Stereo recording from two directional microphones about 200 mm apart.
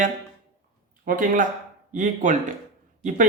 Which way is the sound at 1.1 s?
45° right (ahead or behind).